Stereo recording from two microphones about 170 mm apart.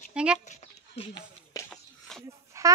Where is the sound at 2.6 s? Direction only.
15° right (ahead or behind).